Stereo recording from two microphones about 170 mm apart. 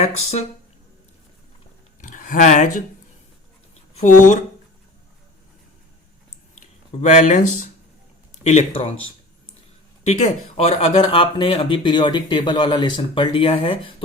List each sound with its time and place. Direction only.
0.0 s speech: 40° left (ahead or behind)
2.0 s speech: 50° left (ahead or behind)
3.9 s speech: 45° left (ahead or behind)
7.0 s speech: 45° left (ahead or behind)
10.1 s speech: 40° left (ahead or behind)